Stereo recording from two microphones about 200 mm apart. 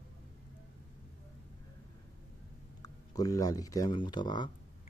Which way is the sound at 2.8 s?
15° left (ahead or behind).